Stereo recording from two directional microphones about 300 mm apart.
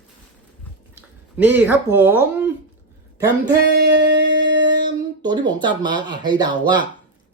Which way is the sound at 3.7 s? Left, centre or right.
Right.